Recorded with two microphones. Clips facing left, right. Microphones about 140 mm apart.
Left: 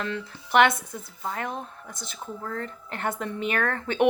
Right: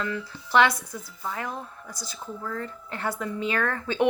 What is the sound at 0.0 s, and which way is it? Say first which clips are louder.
A woman's voice: even; 25° left (ahead or behind).